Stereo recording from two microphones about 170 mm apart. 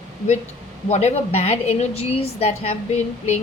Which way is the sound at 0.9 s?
40° left (ahead or behind).